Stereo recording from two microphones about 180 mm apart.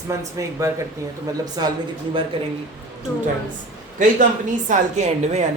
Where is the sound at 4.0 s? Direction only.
45° right (ahead or behind).